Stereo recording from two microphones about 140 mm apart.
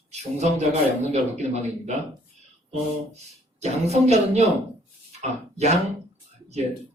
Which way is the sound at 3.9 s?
50° right (ahead or behind).